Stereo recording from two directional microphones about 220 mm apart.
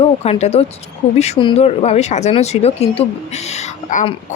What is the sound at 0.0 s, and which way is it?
Speech, 30° left (ahead or behind).